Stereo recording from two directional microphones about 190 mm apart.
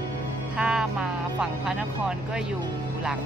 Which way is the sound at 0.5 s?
5° right (ahead or behind).